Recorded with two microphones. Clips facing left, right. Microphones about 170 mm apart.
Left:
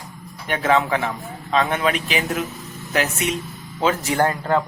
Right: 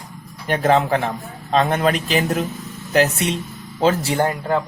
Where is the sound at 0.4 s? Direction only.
35° right (ahead or behind).